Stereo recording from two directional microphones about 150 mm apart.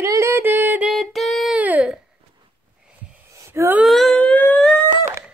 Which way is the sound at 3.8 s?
Centre (ahead or behind).